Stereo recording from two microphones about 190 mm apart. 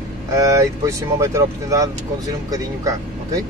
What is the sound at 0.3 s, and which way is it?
Speech, 15° right (ahead or behind).